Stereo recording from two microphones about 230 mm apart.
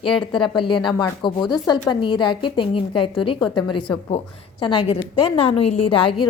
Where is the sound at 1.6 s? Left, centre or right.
Centre.